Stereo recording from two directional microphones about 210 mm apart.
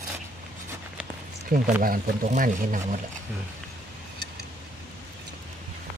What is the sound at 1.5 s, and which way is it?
Speech, 40° right (ahead or behind).